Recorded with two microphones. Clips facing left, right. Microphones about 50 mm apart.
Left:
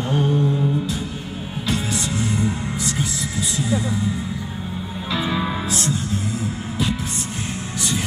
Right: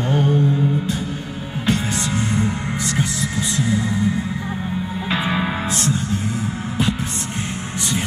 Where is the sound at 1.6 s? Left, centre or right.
Right.